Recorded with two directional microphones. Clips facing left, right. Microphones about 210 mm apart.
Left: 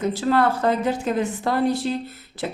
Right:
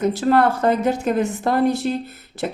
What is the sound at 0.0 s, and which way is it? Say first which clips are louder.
Speech: right 3 dB; 55° right (ahead or behind).